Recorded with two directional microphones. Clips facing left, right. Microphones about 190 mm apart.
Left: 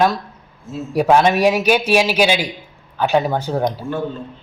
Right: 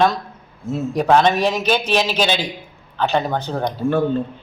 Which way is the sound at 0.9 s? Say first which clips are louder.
Left 2 dB; 10° left (ahead or behind).